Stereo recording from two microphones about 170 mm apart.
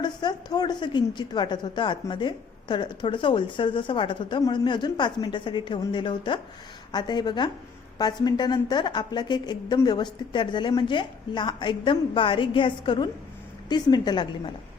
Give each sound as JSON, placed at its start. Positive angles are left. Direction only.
{"t": 0.0, "sound": "a woman's voice", "side_deg": 25}